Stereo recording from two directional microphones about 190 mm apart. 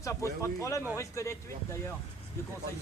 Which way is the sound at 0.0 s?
15° left (ahead or behind).